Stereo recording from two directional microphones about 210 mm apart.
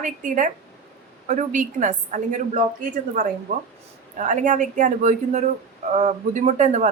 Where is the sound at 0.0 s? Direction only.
35° right (ahead or behind).